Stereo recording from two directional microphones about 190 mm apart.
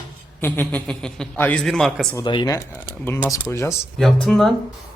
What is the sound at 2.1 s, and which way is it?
Speech, 25° left (ahead or behind).